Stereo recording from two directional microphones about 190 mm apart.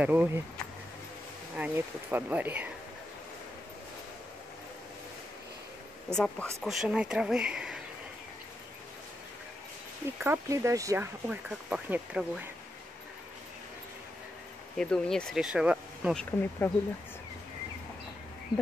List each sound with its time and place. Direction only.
0.0 s speech: 10° right (ahead or behind)
1.6 s speech: 10° right (ahead or behind)
6.1 s speech: centre (ahead or behind)
10.2 s speech: 15° right (ahead or behind)
11.2 s speech: 5° right (ahead or behind)
14.8 s speech: 5° left (ahead or behind)